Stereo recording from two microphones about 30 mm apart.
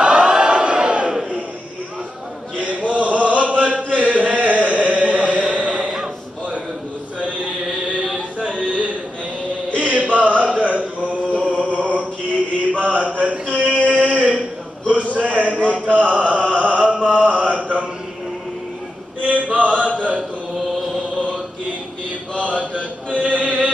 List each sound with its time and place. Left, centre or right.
0.0 s crowd: right
2.5 s chant: right
5.7 s a sound: right
8.4 s a sound: right
9.8 s mantra: right
11.4 s chant: right
12.7 s mantra: right
13.8 s a sound: right
15.7 s mantra: right
19.3 s mantra: right
22.4 s mantra: right
23.1 s music: right